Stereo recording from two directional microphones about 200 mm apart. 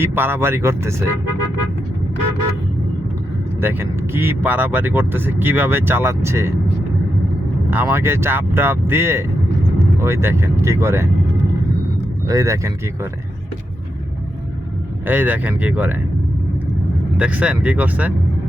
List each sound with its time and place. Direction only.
0.0 s speech: 10° right (ahead or behind)
3.6 s speech: 10° right (ahead or behind)
7.7 s speech: 10° right (ahead or behind)
12.3 s speech: 15° right (ahead or behind)
15.0 s speech: 10° right (ahead or behind)
17.2 s speech: 5° right (ahead or behind)